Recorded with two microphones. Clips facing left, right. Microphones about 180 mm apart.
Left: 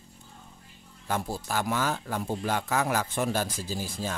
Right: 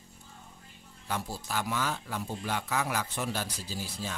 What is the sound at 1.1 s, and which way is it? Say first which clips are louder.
Speech: left 4 dB; 50° left (ahead or behind).